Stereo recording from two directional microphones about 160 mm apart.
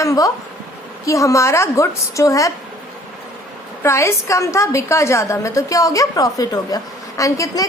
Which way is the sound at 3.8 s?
15° left (ahead or behind).